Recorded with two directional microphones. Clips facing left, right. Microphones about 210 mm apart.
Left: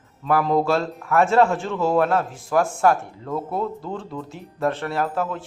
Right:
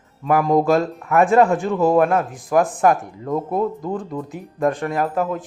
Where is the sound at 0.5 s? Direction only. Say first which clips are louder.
Right 4 dB; 15° right (ahead or behind).